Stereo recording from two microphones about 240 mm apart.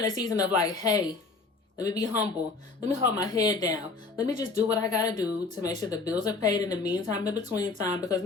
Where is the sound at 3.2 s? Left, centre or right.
Centre.